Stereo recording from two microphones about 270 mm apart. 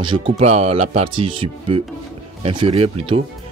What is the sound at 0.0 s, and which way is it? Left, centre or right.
Speech, right.